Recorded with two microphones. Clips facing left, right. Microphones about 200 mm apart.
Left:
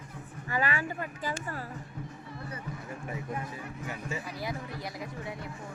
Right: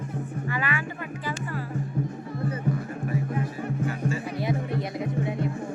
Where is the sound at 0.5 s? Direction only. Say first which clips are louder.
Left 1 dB; 40° left (ahead or behind).